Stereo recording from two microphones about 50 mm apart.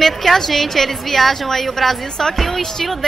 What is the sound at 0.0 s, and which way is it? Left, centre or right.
A woman's voice, centre.